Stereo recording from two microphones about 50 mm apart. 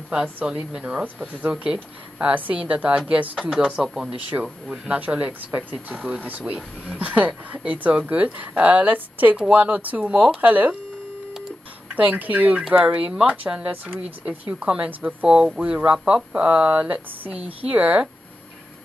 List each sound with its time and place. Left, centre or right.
0.1 s speech: right
0.7 s speech: centre
1.0 s speech: right
1.5 s speech: right
2.3 s speech: right; by 4.1 s centre
4.3 s speech: right
11.9 s speech: right
14.6 s speech: right
14.9 s speech: right
15.2 s speech: centre